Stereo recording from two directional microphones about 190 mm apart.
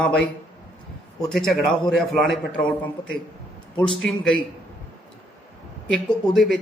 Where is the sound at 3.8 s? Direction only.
5° left (ahead or behind).